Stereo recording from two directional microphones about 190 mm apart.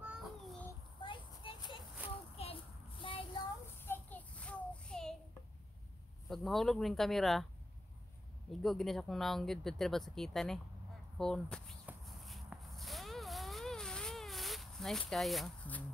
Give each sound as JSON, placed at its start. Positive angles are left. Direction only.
{"t": 0.0, "sound": "a sound", "side_deg": 0}
{"t": 1.0, "sound": "a sound", "side_deg": 25}
{"t": 3.0, "sound": "child singing", "side_deg": 25}
{"t": 3.8, "sound": "child singing", "side_deg": 10}
{"t": 6.2, "sound": "speech", "side_deg": 0}
{"t": 8.5, "sound": "speech", "side_deg": 0}
{"t": 11.8, "sound": "zipper", "side_deg": 0}